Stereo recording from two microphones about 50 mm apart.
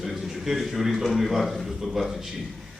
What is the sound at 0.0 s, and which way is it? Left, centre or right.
A man's voice, centre.